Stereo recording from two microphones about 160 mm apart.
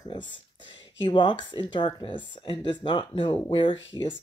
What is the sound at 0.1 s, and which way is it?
Speech, 30° left (ahead or behind).